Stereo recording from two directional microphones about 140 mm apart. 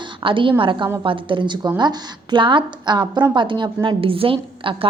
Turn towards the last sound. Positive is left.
turn(degrees=-40)  # may be behind; listen again after turning